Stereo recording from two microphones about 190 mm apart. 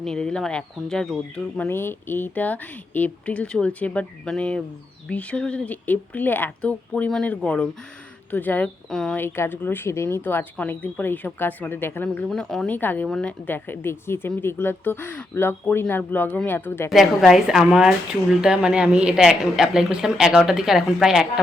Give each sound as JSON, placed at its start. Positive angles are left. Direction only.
{"t": 0.0, "sound": "a woman's voice", "side_deg": 5}
{"t": 16.9, "sound": "a woman's voice", "side_deg": 0}